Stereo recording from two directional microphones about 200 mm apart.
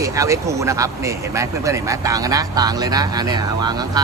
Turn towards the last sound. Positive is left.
turn(degrees=-20)  # may be behind; listen again after turning